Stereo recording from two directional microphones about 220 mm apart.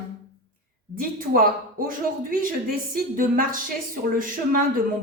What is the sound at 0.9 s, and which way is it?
Speech, 40° right (ahead or behind).